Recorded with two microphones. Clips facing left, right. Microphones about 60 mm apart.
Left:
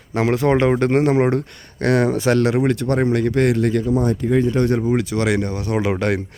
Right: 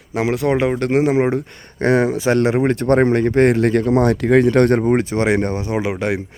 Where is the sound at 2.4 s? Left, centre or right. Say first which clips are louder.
Right 1 dB; right.